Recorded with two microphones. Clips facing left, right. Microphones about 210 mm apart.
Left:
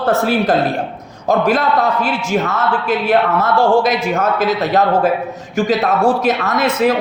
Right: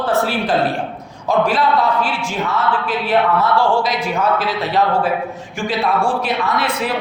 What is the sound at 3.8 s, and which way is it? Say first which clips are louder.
A man's voice: left 3 dB; 45° left (ahead or behind).